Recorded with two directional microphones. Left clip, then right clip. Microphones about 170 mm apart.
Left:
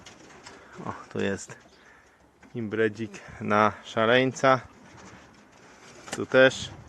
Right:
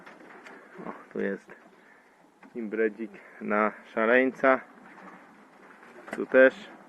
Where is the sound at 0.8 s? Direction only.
30° left (ahead or behind).